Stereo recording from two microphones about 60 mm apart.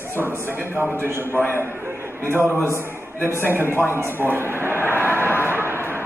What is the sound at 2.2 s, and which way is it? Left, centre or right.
A man's voice, right.